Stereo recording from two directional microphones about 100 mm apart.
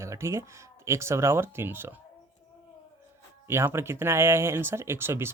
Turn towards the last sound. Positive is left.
turn(degrees=-25)  # may be behind; listen again after turning